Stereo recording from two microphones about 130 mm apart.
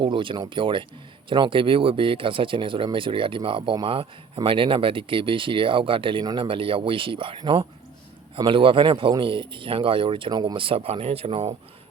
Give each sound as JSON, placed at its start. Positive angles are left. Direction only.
{"t": 0.0, "sound": "speech", "side_deg": -40}